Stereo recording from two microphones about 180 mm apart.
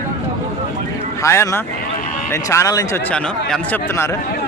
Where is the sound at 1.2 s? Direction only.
15° left (ahead or behind).